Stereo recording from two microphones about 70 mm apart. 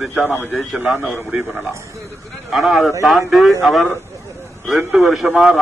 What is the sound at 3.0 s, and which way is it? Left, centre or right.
A man's voice, centre.